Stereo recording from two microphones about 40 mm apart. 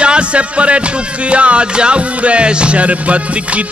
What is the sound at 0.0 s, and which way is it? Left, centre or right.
Music, right.